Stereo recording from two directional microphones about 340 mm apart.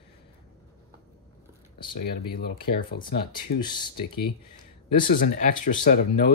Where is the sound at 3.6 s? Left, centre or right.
Centre.